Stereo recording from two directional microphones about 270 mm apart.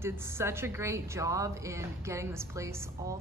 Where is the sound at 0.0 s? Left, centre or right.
Centre.